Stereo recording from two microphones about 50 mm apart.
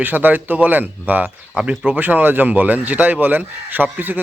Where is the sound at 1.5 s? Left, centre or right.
Right.